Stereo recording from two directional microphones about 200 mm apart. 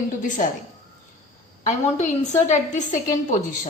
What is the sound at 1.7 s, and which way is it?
A woman's voice, 35° left (ahead or behind).